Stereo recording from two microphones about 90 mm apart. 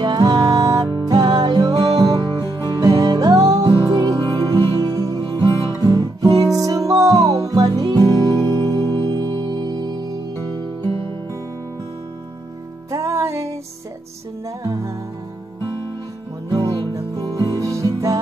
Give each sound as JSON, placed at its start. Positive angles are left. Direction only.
{"t": 0.0, "sound": "music", "side_deg": -45}
{"t": 5.5, "sound": "music", "side_deg": 35}
{"t": 5.8, "sound": "music", "side_deg": -40}
{"t": 10.8, "sound": "music", "side_deg": -65}
{"t": 12.9, "sound": "music", "side_deg": -35}
{"t": 14.6, "sound": "music", "side_deg": -40}
{"t": 16.5, "sound": "music", "side_deg": -45}